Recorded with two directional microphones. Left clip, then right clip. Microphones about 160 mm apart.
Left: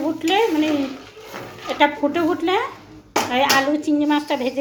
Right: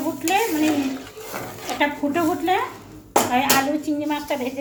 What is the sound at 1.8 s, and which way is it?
Speech, 50° left (ahead or behind).